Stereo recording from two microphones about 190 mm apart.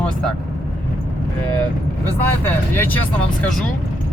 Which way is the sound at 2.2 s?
10° left (ahead or behind).